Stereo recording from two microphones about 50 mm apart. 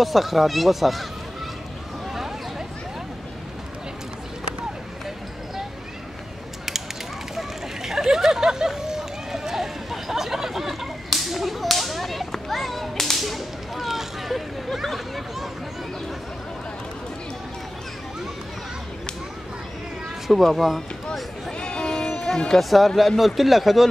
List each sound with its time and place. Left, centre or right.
0.0 s speech: centre
7.3 s hubbub: centre
12.3 s whip: centre
20.2 s speech: centre
21.5 s a sound: centre
22.5 s speech: centre